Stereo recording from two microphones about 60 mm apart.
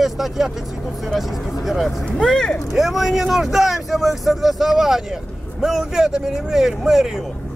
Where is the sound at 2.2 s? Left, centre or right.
Centre.